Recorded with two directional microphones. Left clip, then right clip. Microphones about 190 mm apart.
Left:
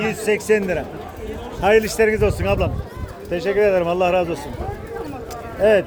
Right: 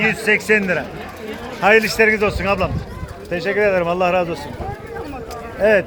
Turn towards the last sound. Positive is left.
turn(degrees=15)  # may be behind; listen again after turning